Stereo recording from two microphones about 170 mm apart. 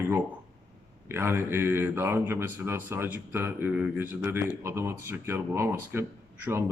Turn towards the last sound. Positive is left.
turn(degrees=-15)  # may be behind; listen again after turning